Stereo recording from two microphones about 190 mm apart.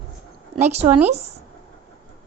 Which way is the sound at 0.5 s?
35° right (ahead or behind).